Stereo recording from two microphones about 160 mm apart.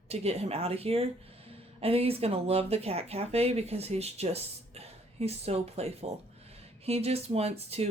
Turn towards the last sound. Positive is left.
turn(degrees=-40)  # may be behind; listen again after turning